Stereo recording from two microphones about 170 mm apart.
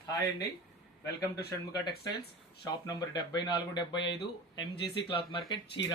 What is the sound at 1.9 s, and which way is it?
Speech, 70° left (ahead or behind).